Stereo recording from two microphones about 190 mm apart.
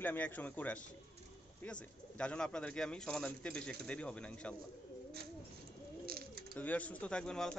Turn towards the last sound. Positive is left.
turn(degrees=5)  # may be behind; listen again after turning